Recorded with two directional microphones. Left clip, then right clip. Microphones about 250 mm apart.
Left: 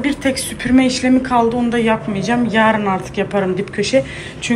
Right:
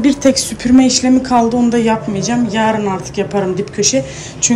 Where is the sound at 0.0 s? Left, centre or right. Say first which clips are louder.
Right 6 dB; right.